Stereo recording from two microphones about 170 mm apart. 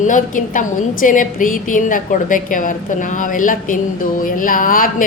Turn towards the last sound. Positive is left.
turn(degrees=55)  # may be behind; listen again after turning